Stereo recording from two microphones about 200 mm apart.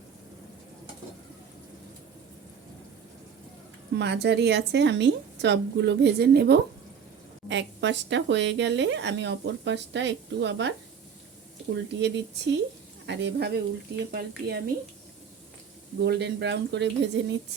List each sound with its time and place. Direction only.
3.9 s speech: 55° right (ahead or behind)
16.0 s speech: 55° right (ahead or behind)